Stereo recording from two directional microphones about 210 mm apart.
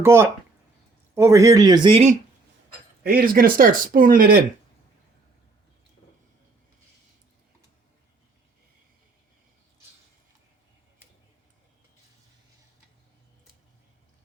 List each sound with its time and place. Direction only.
0.0 s speech: 10° right (ahead or behind); by 2.1 s 25° right (ahead or behind)
3.0 s speech: 45° right (ahead or behind)